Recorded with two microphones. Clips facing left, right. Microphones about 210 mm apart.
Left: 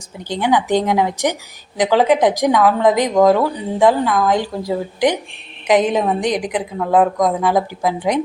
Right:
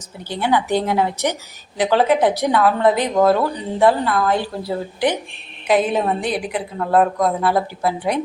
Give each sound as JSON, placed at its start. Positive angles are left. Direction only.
{"t": 0.3, "sound": "a woman's voice", "side_deg": 15}